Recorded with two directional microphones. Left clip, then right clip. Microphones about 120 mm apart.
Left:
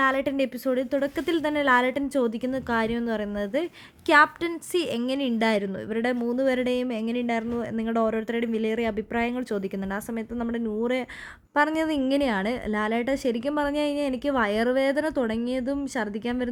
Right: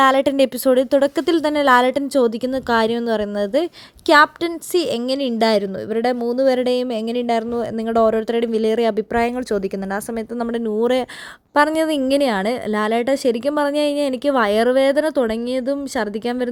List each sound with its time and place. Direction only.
0.0 s a woman's voice: 45° right (ahead or behind); by 16.5 s 30° right (ahead or behind)